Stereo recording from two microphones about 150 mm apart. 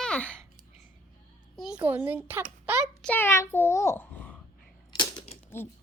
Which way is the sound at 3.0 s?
15° left (ahead or behind).